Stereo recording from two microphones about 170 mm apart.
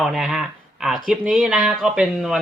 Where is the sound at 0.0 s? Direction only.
Centre (ahead or behind).